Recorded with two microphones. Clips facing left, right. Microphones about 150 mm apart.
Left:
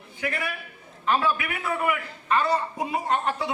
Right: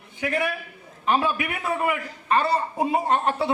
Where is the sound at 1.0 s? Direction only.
20° right (ahead or behind).